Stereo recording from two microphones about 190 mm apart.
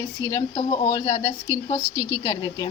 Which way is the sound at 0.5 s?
30° left (ahead or behind).